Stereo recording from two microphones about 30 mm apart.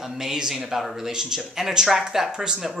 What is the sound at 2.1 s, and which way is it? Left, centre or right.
Speech, centre.